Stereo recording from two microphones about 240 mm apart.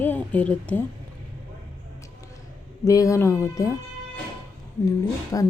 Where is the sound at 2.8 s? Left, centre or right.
Centre.